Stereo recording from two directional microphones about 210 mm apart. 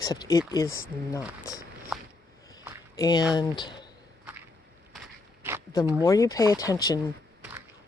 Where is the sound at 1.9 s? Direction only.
5° right (ahead or behind).